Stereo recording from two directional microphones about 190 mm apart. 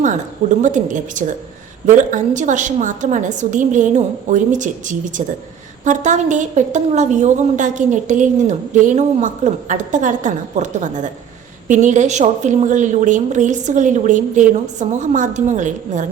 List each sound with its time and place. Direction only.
0.6 s a woman's voice: 40° right (ahead or behind)